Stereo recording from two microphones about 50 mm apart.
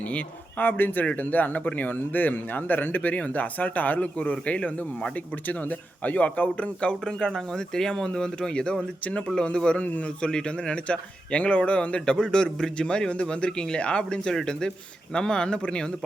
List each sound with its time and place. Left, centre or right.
0.6 s speech: left
6.1 s speech: left
7.0 s speech: centre; by 10.2 s left
10.2 s speech: centre